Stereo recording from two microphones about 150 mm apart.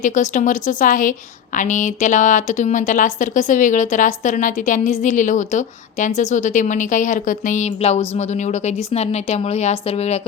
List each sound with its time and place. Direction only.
0.0 s speech: 55° left (ahead or behind)